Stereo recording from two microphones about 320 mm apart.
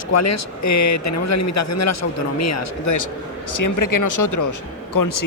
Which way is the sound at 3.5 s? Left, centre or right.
Left.